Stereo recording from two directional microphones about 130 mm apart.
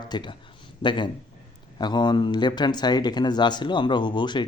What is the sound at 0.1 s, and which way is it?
Speech, 35° left (ahead or behind).